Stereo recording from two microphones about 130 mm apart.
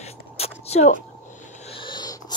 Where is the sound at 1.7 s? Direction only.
40° left (ahead or behind).